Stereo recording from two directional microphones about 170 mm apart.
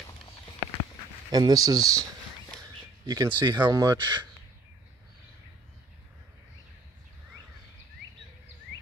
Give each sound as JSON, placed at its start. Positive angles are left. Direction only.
{"t": 1.3, "sound": "speech", "side_deg": -20}
{"t": 3.1, "sound": "speech", "side_deg": -25}